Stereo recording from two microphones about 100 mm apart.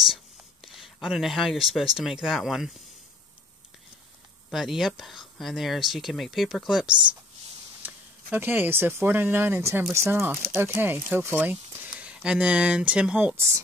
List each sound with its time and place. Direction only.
0.0 s speech: centre (ahead or behind)
4.5 s speech: 5° right (ahead or behind)
7.8 s speech: 20° right (ahead or behind)